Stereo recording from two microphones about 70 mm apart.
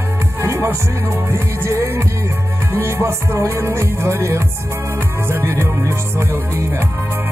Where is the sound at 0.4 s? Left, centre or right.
Right.